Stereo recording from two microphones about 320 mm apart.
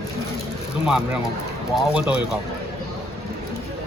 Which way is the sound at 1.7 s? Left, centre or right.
Centre.